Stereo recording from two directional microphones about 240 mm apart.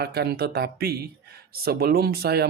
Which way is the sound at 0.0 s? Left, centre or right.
Right.